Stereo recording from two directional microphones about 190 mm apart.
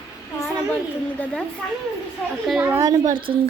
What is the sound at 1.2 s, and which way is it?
Speech, 5° left (ahead or behind).